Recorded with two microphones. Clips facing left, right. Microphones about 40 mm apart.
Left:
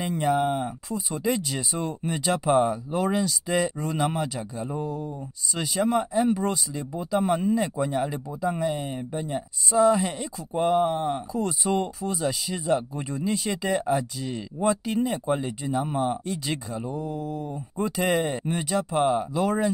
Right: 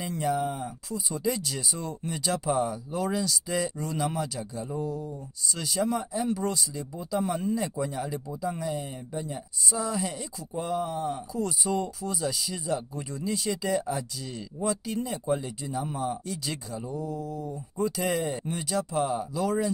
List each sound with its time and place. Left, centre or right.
0.4 s speech: left
1.1 s speech: left
4.8 s speech: left
8.0 s speech: left
11.3 s speech: left
15.2 s speech: left